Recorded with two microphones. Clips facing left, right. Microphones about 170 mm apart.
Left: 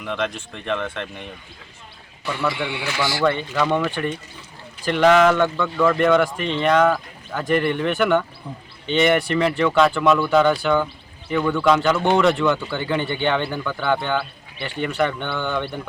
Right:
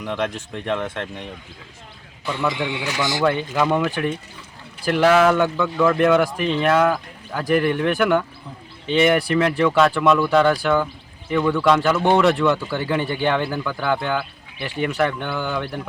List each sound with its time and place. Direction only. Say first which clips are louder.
0.0 s speech: right 1 dB; 15° right (ahead or behind)
2.2 s a man's voice: right 1 dB; 20° right (ahead or behind)
3.5 s speech: right 1 dB; 10° right (ahead or behind)